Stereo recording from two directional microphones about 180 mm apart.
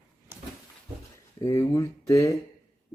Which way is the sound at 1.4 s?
20° left (ahead or behind).